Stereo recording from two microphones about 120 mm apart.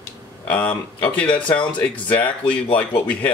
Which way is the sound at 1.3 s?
40° left (ahead or behind).